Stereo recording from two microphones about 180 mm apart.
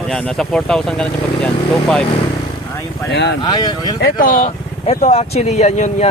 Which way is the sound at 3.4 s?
25° left (ahead or behind).